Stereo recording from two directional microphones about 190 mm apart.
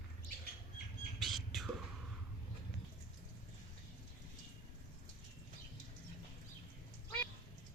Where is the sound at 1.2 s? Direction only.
Centre (ahead or behind).